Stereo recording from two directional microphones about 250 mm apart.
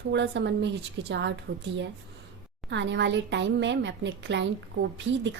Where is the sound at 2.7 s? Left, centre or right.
Right.